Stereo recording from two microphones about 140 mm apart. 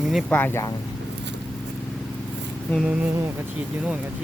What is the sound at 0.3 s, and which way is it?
Speech, 15° left (ahead or behind).